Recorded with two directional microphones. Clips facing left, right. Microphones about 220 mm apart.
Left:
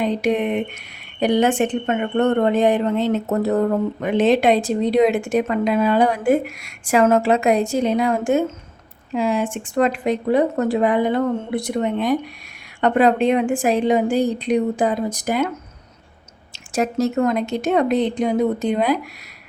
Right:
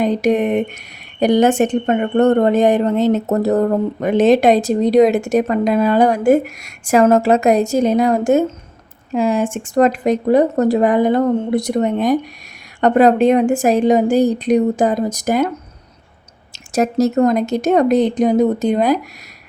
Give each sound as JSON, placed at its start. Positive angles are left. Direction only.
{"t": 0.0, "sound": "a woman's voice", "side_deg": -45}